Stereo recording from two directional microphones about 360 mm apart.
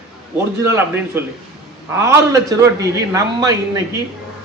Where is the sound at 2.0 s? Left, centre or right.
Centre.